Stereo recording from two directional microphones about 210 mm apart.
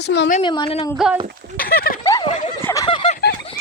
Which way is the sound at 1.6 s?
45° left (ahead or behind).